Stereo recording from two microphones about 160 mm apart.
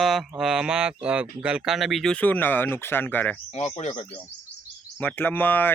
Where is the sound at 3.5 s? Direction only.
45° left (ahead or behind).